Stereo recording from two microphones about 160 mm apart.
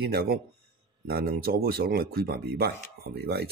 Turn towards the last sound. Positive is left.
turn(degrees=-85)